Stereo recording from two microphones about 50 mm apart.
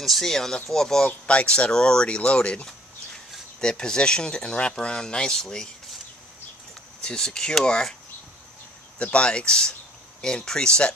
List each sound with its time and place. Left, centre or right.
0.0 s speech: centre
1.0 s speech: left
7.0 s speech: centre
8.9 s speech: left